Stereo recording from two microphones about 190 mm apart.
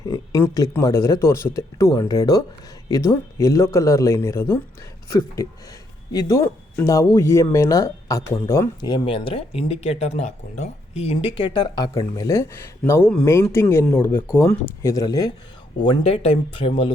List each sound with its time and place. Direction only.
0.0 s speech: 20° left (ahead or behind)